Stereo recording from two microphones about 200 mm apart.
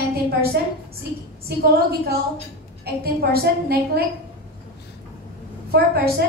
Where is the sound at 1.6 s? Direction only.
50° right (ahead or behind).